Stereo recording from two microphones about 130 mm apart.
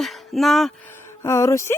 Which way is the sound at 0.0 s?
Centre (ahead or behind).